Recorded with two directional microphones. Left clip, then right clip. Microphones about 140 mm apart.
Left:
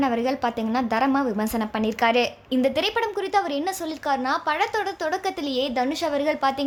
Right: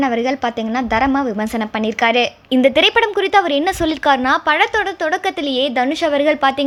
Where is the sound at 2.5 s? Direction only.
35° right (ahead or behind).